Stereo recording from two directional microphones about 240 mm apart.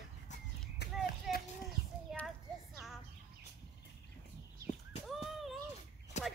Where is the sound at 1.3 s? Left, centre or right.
Centre.